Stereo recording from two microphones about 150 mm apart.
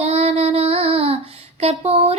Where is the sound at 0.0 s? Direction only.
45° right (ahead or behind).